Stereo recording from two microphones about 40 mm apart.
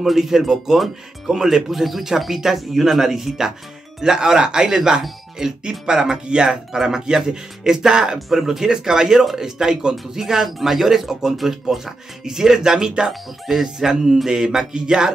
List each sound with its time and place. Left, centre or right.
0.0 s speech: centre